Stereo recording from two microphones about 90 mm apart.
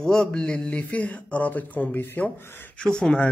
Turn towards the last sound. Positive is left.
turn(degrees=10)  # may be behind; listen again after turning